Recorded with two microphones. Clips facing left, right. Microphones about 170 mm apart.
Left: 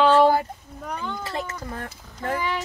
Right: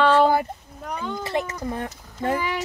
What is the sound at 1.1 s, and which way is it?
Speech, 20° right (ahead or behind).